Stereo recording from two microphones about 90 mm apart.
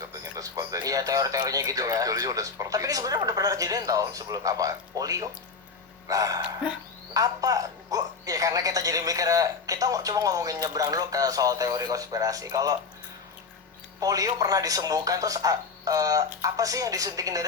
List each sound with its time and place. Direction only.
0.1 s speech: 40° right (ahead or behind)
6.4 s speech: 10° right (ahead or behind)
7.1 s speech: 40° right (ahead or behind)
14.0 s speech: 40° right (ahead or behind)